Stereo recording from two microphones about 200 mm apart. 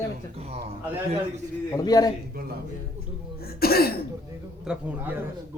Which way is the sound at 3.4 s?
50° left (ahead or behind).